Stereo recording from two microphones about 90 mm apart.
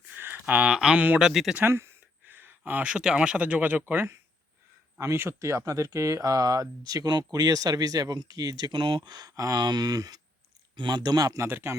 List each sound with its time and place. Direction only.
0.1 s a sound: 20° right (ahead or behind)
0.4 s speech: 15° right (ahead or behind)
1.5 s speech: 25° right (ahead or behind); by 9.1 s 65° right (ahead or behind)
9.1 s speech: 40° right (ahead or behind)
11.4 s speech: 30° right (ahead or behind)